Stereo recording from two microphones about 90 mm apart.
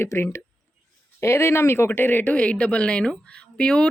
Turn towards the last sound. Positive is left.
turn(degrees=10)  # may be behind; listen again after turning